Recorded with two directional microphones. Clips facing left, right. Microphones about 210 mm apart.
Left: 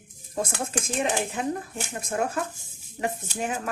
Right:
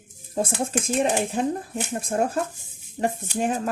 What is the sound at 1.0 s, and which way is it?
Speech, 35° right (ahead or behind).